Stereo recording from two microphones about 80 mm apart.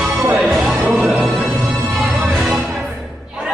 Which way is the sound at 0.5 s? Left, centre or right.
Centre.